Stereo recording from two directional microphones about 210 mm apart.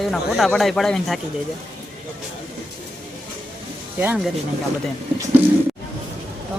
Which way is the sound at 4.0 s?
5° right (ahead or behind).